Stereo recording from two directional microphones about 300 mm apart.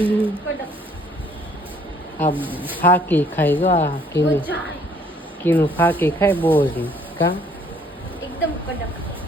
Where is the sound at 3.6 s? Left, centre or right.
Centre.